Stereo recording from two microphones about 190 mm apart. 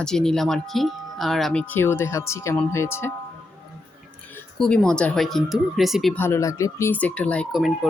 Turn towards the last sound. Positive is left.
turn(degrees=0)  # may be behind; listen again after turning